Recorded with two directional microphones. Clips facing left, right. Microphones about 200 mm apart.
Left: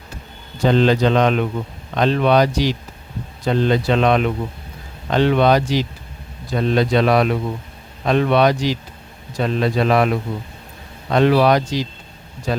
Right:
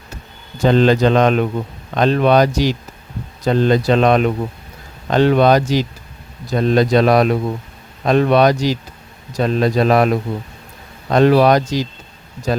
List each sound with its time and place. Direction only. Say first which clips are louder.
0.6 s speech: right 2 dB; 45° right (ahead or behind)